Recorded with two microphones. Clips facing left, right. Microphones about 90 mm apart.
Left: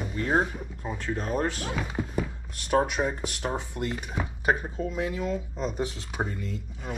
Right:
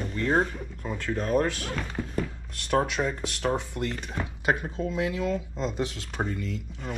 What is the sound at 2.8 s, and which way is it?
Speech, 20° left (ahead or behind).